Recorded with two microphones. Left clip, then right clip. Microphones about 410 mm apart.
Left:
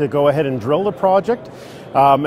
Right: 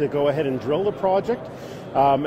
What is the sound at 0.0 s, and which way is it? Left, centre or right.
A man's voice, left.